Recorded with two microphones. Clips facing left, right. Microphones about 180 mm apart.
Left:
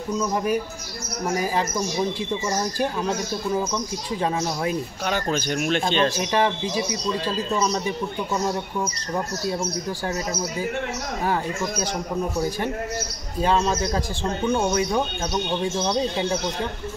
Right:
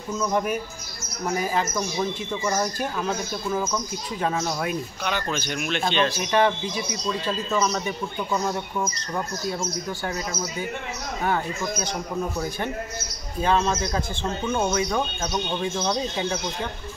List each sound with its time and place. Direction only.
2.4 s speech: 30° left (ahead or behind)
4.2 s speech: 30° left (ahead or behind)
5.0 s speech: 40° left (ahead or behind)
13.4 s speech: 35° left (ahead or behind)